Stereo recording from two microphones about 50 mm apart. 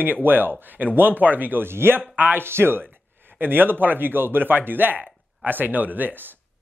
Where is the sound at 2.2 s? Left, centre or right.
Right.